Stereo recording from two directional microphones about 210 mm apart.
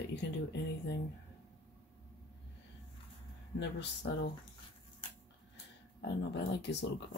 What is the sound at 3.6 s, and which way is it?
Speech, 55° left (ahead or behind).